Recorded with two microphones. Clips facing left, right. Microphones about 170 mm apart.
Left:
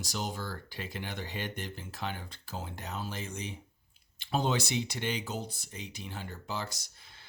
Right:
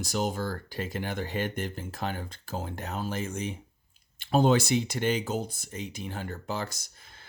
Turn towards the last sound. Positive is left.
turn(degrees=-50)  # may be behind; listen again after turning